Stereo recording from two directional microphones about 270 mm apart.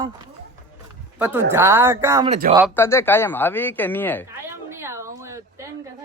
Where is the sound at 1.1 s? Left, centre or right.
Centre.